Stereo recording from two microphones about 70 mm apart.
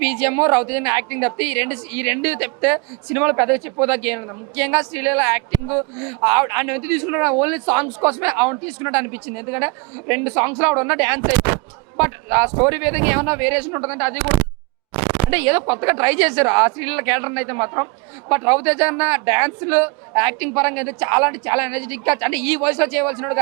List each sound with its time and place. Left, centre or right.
0.0 s a man's voice: right